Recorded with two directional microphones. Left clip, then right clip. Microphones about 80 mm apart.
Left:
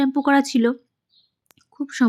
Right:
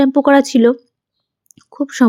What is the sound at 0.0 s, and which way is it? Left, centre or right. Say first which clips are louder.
Speech: right 8 dB; right.